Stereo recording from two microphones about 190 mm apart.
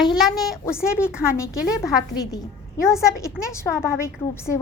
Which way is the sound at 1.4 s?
15° left (ahead or behind).